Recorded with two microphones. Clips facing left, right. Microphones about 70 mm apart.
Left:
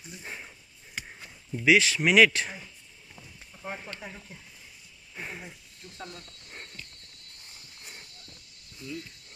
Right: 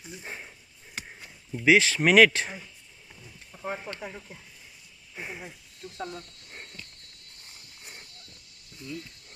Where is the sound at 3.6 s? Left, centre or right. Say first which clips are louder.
Right 4 dB; right.